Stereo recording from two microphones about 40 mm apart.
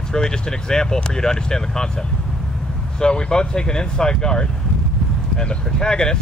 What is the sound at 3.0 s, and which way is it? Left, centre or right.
Speech, left.